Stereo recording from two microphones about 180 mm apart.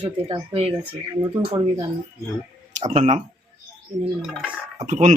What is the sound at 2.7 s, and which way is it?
Speech, 35° right (ahead or behind).